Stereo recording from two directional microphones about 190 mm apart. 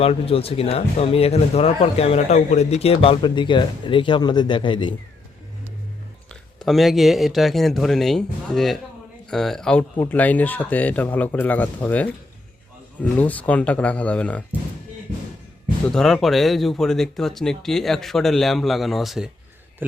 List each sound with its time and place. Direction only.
0.0 s speech: 30° left (ahead or behind)
6.6 s a man's voice: centre (ahead or behind)
15.9 s speech: centre (ahead or behind)